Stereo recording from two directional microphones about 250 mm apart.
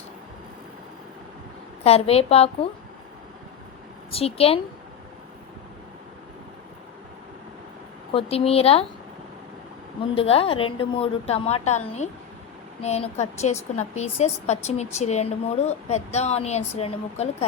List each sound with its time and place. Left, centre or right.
1.8 s a woman's voice: left
4.1 s a woman's voice: left
8.1 s a woman's voice: left
10.2 s a woman's voice: left